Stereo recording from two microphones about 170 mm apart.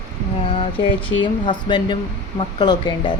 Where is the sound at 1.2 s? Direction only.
30° left (ahead or behind).